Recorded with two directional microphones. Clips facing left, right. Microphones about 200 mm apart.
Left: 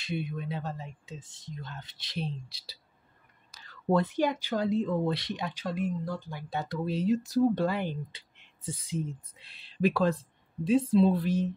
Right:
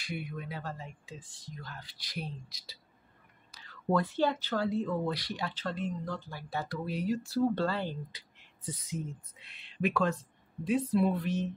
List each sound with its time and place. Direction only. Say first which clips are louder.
0.0 s speech: left 5 dB; 25° left (ahead or behind)
3.5 s whispering: left 1 dB; 45° left (ahead or behind)
3.9 s speech: left 2 dB; 20° left (ahead or behind)